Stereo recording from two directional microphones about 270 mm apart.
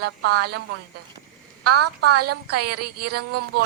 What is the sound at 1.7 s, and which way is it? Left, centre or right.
Speech, right.